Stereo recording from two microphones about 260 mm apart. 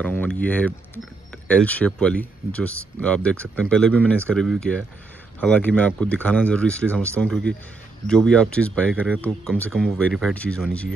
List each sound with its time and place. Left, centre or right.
0.0 s speech: centre